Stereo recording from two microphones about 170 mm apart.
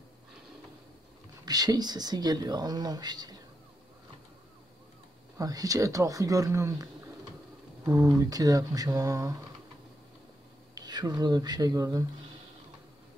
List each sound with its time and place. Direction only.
1.4 s speech: 20° right (ahead or behind)
5.4 s speech: 20° right (ahead or behind)
10.7 s speech: 25° right (ahead or behind)